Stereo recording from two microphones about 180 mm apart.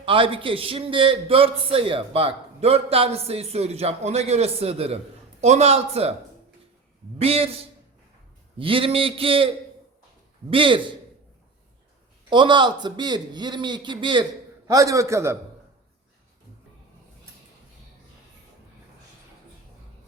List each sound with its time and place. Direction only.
0.0 s a man's voice: 30° right (ahead or behind)
7.2 s a man's voice: 35° right (ahead or behind)
10.5 s a man's voice: 30° right (ahead or behind)
12.3 s a man's voice: 25° right (ahead or behind)